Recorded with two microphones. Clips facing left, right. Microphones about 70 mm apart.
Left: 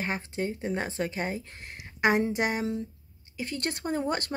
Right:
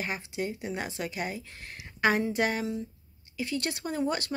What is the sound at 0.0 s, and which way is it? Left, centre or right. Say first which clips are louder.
Speech: left 2 dB; left.